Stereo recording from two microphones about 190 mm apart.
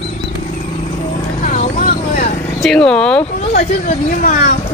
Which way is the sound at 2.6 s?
5° left (ahead or behind).